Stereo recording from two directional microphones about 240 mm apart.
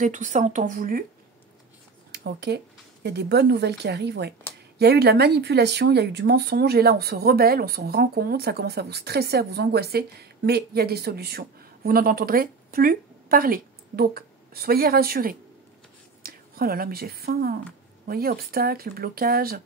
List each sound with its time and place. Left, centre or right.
0.0 s speech: right
2.1 s speech: right
16.2 s a sound: right
17.2 s speech: right